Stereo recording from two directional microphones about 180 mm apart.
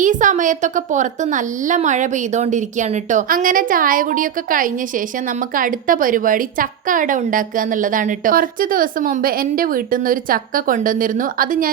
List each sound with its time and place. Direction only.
0.0 s a woman's voice: 45° right (ahead or behind)